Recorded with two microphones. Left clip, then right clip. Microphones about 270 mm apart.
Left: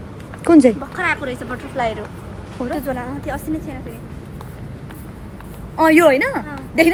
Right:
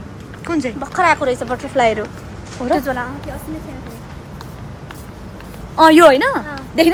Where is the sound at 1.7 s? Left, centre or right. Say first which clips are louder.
Right 7 dB; right.